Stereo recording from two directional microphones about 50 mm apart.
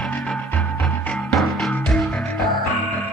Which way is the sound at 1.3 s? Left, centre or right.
Centre.